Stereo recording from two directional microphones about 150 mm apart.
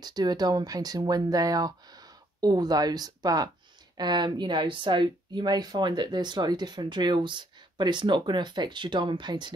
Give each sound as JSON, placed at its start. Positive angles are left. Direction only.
{"t": 0.0, "sound": "speech", "side_deg": -25}